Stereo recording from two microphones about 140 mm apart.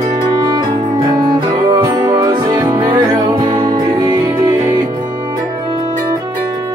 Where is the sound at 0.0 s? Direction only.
30° right (ahead or behind).